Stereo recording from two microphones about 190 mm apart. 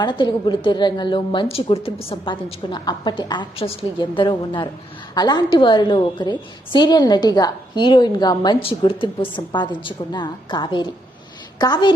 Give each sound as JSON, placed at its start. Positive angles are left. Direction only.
{"t": 0.0, "sound": "a woman's voice", "side_deg": 25}